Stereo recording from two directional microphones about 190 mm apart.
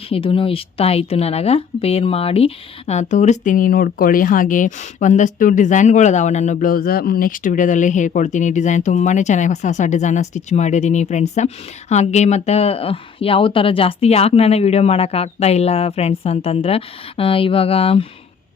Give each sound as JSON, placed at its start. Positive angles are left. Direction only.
{"t": 0.1, "sound": "a woman's voice", "side_deg": 30}